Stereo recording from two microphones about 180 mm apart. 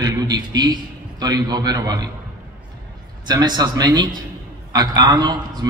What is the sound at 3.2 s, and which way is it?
A man's voice, 20° right (ahead or behind).